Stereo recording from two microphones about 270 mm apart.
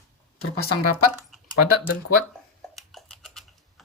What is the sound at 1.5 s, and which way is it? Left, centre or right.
Speech, left.